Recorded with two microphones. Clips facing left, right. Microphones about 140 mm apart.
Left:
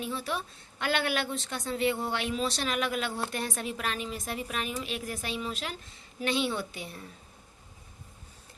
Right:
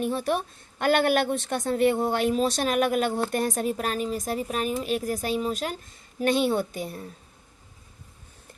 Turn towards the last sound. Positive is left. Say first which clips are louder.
# right 7 dB
turn(degrees=-40)  # may be behind; listen again after turning